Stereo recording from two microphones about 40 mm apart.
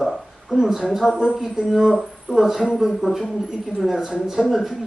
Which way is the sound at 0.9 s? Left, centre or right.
Centre.